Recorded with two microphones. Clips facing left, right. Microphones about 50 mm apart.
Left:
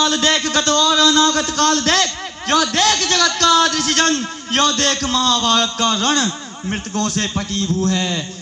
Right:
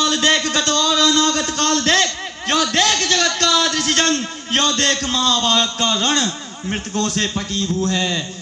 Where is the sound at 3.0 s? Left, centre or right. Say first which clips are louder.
Left 2 dB; left.